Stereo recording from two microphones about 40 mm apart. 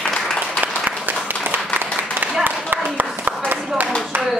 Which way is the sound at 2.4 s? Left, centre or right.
Right.